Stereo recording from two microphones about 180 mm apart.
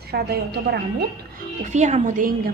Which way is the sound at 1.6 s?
40° right (ahead or behind).